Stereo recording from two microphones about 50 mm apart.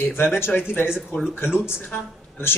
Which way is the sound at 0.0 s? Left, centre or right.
Left.